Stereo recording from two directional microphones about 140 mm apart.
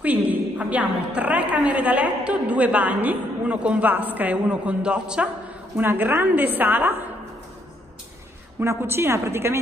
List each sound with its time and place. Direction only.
0.0 s a woman's voice: 10° right (ahead or behind)
8.5 s a woman's voice: 15° right (ahead or behind)